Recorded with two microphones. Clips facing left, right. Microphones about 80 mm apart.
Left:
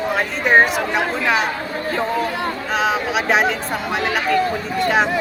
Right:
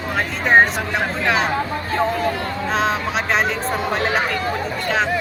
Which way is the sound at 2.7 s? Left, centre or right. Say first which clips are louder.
Left 1 dB; centre.